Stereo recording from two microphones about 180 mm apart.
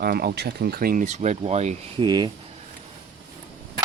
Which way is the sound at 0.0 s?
60° right (ahead or behind).